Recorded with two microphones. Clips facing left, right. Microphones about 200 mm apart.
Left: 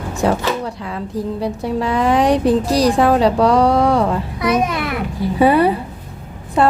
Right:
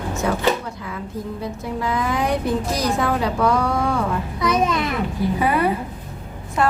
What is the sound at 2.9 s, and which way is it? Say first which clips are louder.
Speech: left 7 dB; 30° left (ahead or behind).